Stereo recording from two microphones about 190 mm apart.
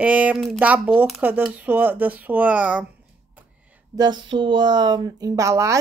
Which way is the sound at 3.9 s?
25° right (ahead or behind).